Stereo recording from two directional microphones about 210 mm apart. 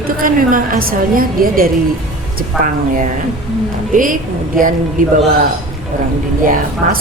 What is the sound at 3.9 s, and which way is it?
A woman's voice, 40° right (ahead or behind).